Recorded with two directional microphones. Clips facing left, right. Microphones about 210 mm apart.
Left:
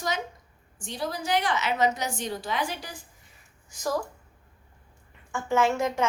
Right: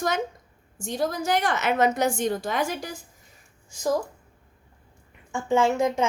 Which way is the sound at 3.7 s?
25° right (ahead or behind).